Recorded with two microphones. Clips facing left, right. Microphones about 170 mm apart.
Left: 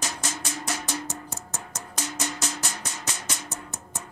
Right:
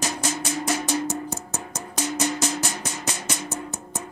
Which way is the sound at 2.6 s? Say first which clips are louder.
Right 5 dB; 15° right (ahead or behind).